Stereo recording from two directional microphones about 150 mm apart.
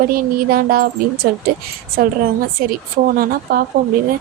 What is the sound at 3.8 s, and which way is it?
Speech, 70° right (ahead or behind).